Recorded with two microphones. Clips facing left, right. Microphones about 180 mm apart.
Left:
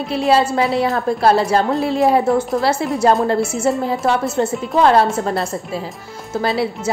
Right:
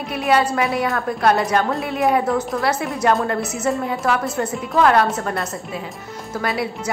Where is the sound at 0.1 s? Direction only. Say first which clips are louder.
Left 3 dB; 25° left (ahead or behind).